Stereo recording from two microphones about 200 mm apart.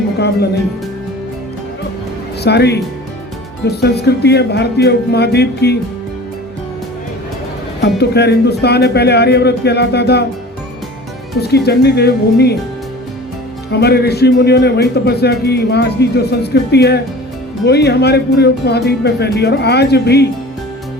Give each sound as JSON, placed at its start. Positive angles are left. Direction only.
{"t": 2.4, "sound": "speech", "side_deg": 55}
{"t": 7.8, "sound": "speech", "side_deg": 55}
{"t": 11.3, "sound": "speech", "side_deg": 55}
{"t": 13.7, "sound": "speech", "side_deg": 55}